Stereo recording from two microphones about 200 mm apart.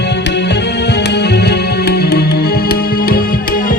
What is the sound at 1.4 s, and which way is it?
Music, 55° left (ahead or behind).